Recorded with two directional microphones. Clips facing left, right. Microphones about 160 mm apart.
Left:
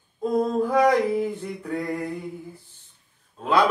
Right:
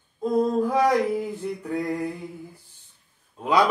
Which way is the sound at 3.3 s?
10° right (ahead or behind).